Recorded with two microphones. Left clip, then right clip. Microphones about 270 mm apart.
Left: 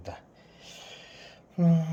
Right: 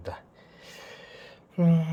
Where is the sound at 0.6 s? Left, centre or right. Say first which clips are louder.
Right 1 dB; right.